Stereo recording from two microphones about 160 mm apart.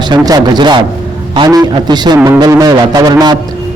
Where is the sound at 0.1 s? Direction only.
25° right (ahead or behind).